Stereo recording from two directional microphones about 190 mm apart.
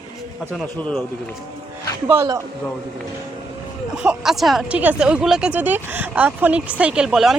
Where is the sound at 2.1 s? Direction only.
15° right (ahead or behind).